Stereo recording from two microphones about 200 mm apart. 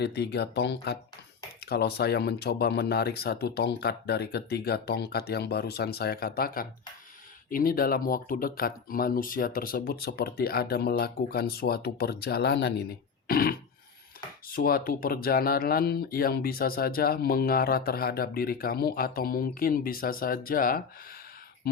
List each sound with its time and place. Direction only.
0.0 s speech: 55° left (ahead or behind)